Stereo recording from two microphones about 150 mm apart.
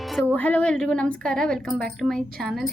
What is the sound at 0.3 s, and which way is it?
A woman's voice, 10° left (ahead or behind).